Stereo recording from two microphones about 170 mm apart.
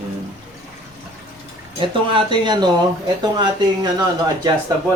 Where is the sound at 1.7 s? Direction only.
30° right (ahead or behind).